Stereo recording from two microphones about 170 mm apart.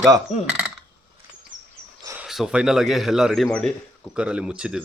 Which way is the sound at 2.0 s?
15° right (ahead or behind).